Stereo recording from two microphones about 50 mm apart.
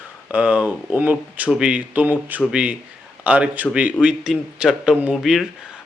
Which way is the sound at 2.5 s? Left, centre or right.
Right.